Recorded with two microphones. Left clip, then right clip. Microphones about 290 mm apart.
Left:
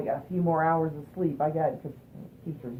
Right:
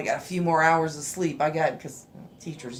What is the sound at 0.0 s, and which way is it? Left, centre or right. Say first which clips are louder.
A woman's voice: right 3 dB; centre.